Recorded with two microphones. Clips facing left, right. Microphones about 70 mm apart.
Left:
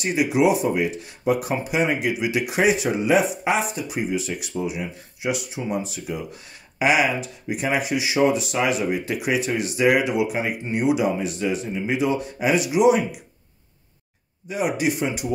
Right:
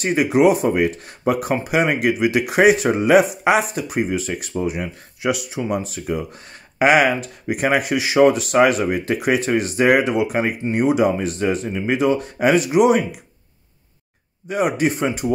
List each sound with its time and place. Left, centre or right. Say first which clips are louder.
0.0 s speech: right 4 dB; right
3.7 s speech: right 4 dB; right
14.5 s speech: right 4 dB; right